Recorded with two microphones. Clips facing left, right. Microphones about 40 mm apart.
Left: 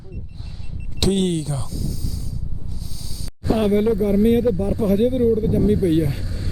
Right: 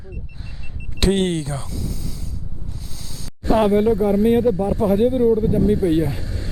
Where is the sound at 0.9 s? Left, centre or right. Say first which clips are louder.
Right 1 dB; right.